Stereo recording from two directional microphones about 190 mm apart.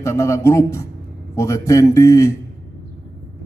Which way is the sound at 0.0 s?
15° left (ahead or behind).